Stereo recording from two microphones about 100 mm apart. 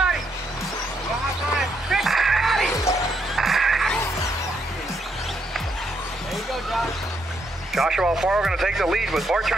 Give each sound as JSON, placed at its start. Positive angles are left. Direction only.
{"t": 1.6, "sound": "music", "side_deg": -5}
{"t": 2.7, "sound": "music", "side_deg": 30}
{"t": 3.3, "sound": "a sound", "side_deg": -5}
{"t": 7.7, "sound": "speech", "side_deg": -5}